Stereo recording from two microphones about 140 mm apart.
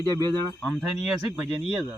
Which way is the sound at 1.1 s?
Centre (ahead or behind).